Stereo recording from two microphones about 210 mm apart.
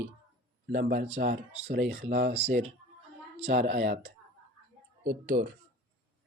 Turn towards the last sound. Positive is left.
turn(degrees=-40)  # may be behind; listen again after turning